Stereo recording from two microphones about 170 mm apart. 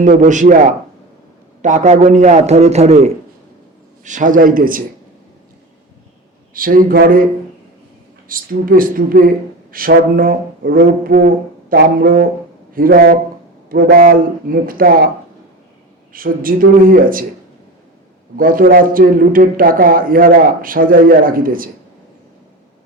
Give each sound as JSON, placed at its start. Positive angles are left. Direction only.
{"t": 0.0, "sound": "a man's voice", "side_deg": -50}
{"t": 1.6, "sound": "a man's voice", "side_deg": -45}
{"t": 6.5, "sound": "a man's voice", "side_deg": -55}
{"t": 8.3, "sound": "a man's voice", "side_deg": -55}
{"t": 16.1, "sound": "a man's voice", "side_deg": -55}
{"t": 18.3, "sound": "a man's voice", "side_deg": -55}